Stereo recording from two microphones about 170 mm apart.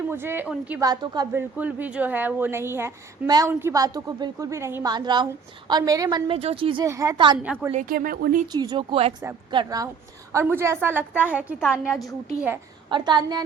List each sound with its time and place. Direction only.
0.1 s a woman's voice: 15° right (ahead or behind)
0.8 s a woman's voice: 25° right (ahead or behind)
1.3 s a woman's voice: 10° right (ahead or behind); by 6.8 s 30° right (ahead or behind)
6.8 s a woman's voice: 20° right (ahead or behind)
7.7 s speech: 45° right (ahead or behind)
7.9 s speech: 60° right (ahead or behind)
8.5 s a woman's voice: 25° right (ahead or behind); by 12.0 s 5° right (ahead or behind)
12.9 s a woman's voice: 25° right (ahead or behind)